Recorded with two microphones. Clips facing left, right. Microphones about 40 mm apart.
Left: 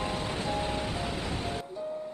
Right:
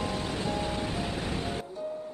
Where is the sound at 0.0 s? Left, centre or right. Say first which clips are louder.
Even; left.